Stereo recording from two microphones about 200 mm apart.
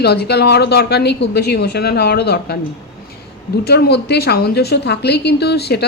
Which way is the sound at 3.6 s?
55° left (ahead or behind).